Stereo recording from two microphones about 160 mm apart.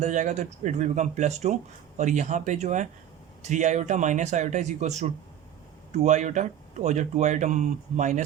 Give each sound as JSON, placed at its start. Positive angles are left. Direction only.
{"t": 0.0, "sound": "speech", "side_deg": -45}